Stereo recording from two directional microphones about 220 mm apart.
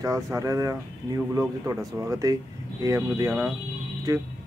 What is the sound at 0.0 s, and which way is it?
Speech, 15° right (ahead or behind).